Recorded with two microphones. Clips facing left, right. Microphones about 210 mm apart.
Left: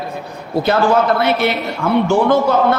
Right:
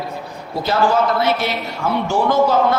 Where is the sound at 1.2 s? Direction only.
60° left (ahead or behind).